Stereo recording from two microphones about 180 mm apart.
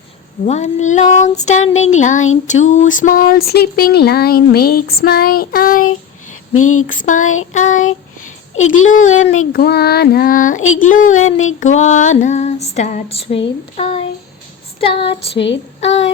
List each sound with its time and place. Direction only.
0.4 s female singing: 40° left (ahead or behind)
2.0 s child singing: 45° left (ahead or behind)
2.3 s a sound: 40° left (ahead or behind)
6.8 s child singing: 45° left (ahead or behind)
8.5 s speech: 90° left
8.8 s child singing: 45° left (ahead or behind)
11.3 s child singing: 90° left
11.6 s female singing: 40° left (ahead or behind)
15.3 s female singing: 75° left (ahead or behind)
15.8 s female singing: 35° left (ahead or behind)